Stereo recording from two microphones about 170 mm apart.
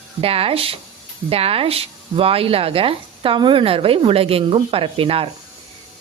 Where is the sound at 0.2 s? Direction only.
35° right (ahead or behind).